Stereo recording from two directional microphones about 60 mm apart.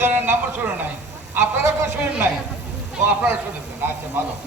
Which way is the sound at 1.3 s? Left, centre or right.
Right.